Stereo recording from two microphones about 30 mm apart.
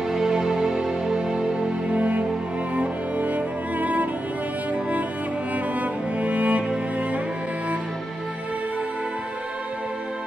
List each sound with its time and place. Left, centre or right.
0.1 s music: centre
1.1 s music: right
1.9 s music: right
5.8 s music: right